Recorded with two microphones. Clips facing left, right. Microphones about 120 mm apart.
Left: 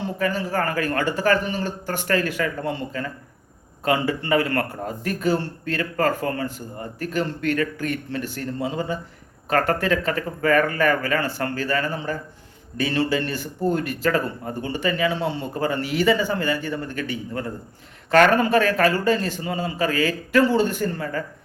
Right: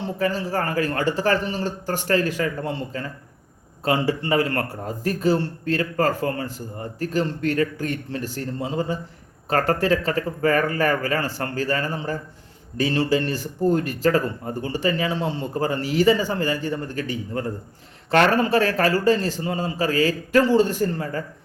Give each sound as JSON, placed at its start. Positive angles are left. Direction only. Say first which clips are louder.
{"t": 0.0, "sound": "speech", "louder": "even", "side_deg": -30}